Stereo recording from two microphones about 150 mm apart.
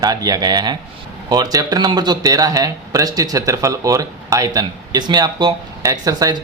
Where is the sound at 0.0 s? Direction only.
25° right (ahead or behind).